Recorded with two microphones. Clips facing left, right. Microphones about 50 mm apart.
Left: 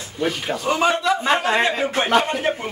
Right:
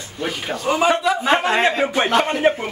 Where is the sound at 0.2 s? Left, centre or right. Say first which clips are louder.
Left 2 dB; centre.